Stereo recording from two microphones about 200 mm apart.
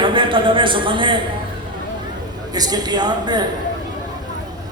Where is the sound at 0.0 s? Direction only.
25° right (ahead or behind).